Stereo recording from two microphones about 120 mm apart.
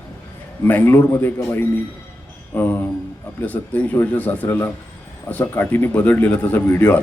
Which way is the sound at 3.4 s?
15° left (ahead or behind).